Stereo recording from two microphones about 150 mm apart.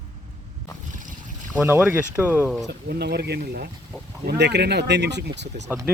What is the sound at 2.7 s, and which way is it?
Speech, 90° right.